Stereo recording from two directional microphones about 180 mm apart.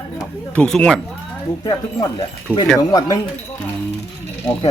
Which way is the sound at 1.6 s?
20° left (ahead or behind).